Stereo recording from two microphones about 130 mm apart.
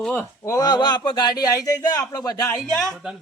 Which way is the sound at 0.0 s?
10° left (ahead or behind).